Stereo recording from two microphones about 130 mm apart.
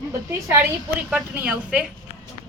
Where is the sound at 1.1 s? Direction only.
15° right (ahead or behind).